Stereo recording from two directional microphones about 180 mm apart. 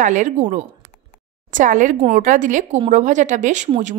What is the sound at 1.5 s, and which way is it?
A woman's voice, 45° right (ahead or behind).